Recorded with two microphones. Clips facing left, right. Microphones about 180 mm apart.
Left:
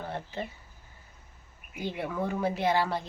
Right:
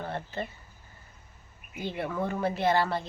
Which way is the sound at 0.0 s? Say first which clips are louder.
Right 1 dB; 10° left (ahead or behind).